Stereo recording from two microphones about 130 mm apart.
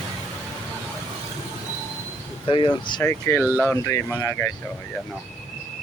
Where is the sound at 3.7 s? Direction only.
20° left (ahead or behind).